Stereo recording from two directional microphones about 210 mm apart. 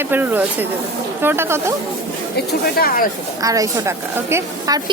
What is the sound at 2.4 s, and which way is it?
Speech, 45° left (ahead or behind).